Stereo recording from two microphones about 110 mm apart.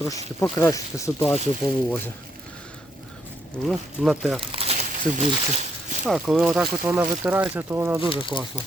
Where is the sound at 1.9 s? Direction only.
20° left (ahead or behind).